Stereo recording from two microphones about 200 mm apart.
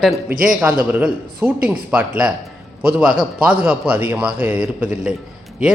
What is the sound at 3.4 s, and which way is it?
Speech, 10° right (ahead or behind).